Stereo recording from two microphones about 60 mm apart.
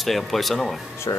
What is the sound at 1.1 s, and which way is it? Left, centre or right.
Speech, left.